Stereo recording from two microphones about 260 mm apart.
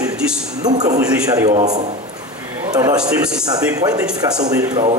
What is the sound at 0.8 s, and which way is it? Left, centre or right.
Speech, centre.